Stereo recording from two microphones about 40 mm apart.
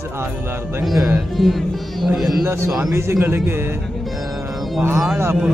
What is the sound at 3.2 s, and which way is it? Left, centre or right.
Speech, right.